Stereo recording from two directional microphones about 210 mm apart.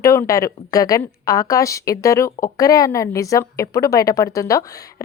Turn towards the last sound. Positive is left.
turn(degrees=15)  # may be behind; listen again after turning